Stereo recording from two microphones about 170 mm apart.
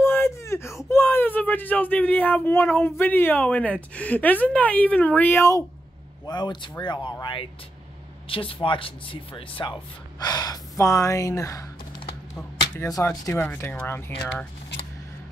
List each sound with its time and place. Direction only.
0.0 s whimper: 15° left (ahead or behind)
0.8 s speech: 15° left (ahead or behind)
6.2 s speech: 25° left (ahead or behind)
12.7 s speech: 15° left (ahead or behind)